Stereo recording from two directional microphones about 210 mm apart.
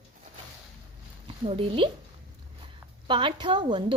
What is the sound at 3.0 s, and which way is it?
Speech, 25° right (ahead or behind).